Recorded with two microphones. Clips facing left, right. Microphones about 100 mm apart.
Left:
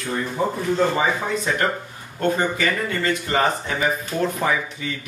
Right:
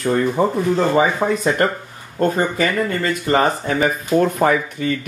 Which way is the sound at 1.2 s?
45° right (ahead or behind).